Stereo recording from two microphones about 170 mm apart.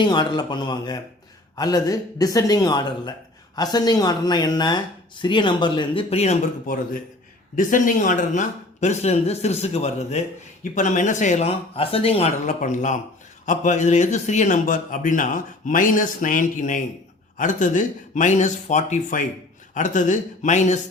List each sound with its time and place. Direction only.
0.0 s speech: 25° left (ahead or behind)
7.5 s speech: 50° left (ahead or behind)